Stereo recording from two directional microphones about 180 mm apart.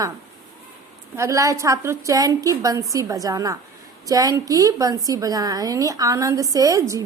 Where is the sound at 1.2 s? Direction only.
15° right (ahead or behind).